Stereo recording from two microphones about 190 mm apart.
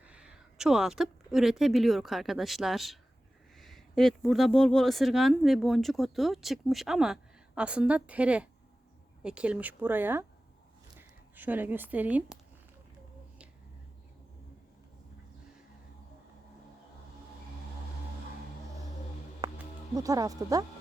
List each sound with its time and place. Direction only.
0.0 s speech: 5° right (ahead or behind)
11.3 s speech: 10° right (ahead or behind)
20.0 s speech: 20° right (ahead or behind)